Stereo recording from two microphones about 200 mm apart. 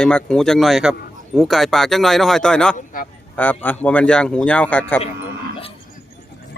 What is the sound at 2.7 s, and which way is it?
Speech, 45° left (ahead or behind).